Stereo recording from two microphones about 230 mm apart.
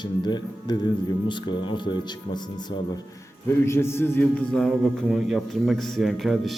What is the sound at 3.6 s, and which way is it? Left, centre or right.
A man's voice, centre.